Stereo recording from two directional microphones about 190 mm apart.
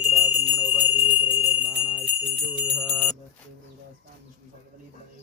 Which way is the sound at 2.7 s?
10° left (ahead or behind).